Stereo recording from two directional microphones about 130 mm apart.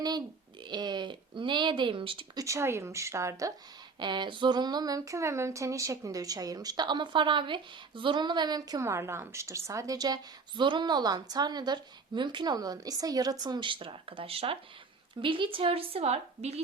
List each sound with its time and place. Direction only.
0.7 s speech: 35° right (ahead or behind)
2.4 s speech: 20° right (ahead or behind)
4.0 s speech: 35° right (ahead or behind); by 16.6 s 55° right (ahead or behind)